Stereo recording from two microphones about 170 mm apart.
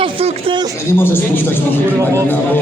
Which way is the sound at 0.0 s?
35° right (ahead or behind).